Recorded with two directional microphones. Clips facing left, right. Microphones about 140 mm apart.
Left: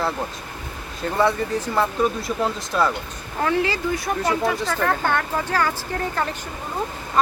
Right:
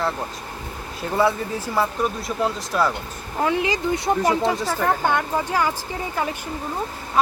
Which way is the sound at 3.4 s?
15° right (ahead or behind).